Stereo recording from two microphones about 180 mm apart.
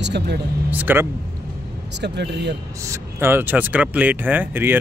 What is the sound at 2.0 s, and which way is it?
Speech, 70° right (ahead or behind).